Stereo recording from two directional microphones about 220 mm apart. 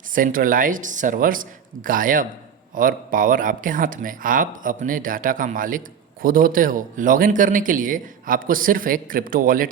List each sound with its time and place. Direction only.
0.1 s speech: 40° right (ahead or behind)